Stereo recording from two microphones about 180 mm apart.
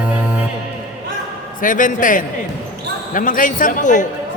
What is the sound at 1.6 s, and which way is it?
A man's voice, 45° left (ahead or behind).